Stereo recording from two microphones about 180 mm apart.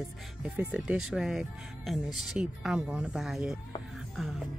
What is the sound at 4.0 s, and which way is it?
Music, centre (ahead or behind).